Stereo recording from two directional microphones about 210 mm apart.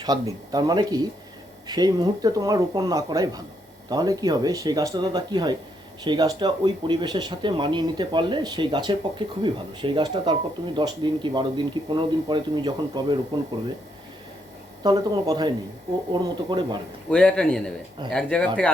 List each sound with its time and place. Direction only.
0.0 s speech: 20° right (ahead or behind)
14.8 s speech: 20° right (ahead or behind)
17.1 s speech: 5° left (ahead or behind)